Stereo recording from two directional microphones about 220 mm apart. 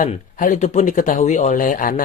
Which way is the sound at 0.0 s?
35° left (ahead or behind).